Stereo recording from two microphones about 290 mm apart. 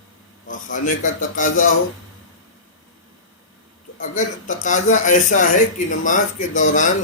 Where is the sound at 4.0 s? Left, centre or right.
Left.